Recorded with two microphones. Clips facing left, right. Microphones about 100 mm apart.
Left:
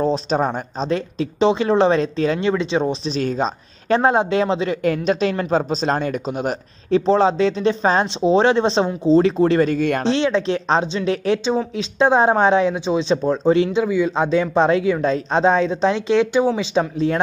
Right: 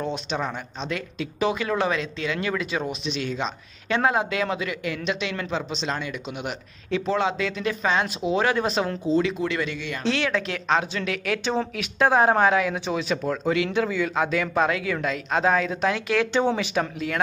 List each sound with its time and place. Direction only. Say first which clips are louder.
0.0 s speech: left 9 dB; 35° left (ahead or behind)
4.8 s speech: left 11 dB; 40° left (ahead or behind)
10.0 s a man's voice: left 7 dB; 25° left (ahead or behind)
13.7 s a man's voice: left 5 dB; 20° left (ahead or behind)